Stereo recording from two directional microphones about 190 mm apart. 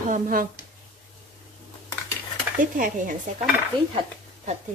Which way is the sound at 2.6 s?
45° right (ahead or behind).